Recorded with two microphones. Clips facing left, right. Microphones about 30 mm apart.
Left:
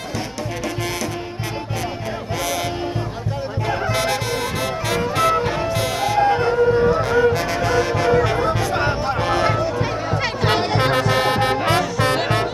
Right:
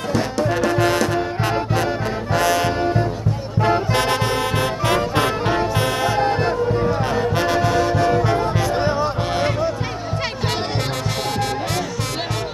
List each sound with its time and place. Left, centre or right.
0.1 s music: right
2.3 s music: right
3.7 s music: right
7.6 s music: left
10.8 s music: left